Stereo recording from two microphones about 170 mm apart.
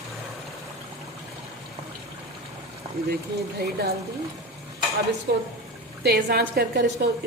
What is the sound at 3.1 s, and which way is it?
Speech, 70° right (ahead or behind).